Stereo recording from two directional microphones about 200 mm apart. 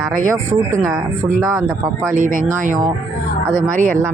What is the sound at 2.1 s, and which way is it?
Speech, 40° right (ahead or behind).